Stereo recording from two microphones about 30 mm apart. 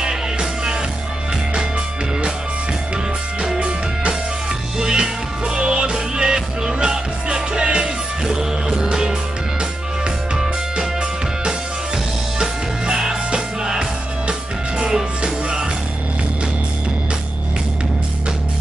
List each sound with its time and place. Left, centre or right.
0.0 s music: right
4.7 s music: right
8.3 s music: centre
8.8 s music: right
10.3 s music: centre
12.4 s music: right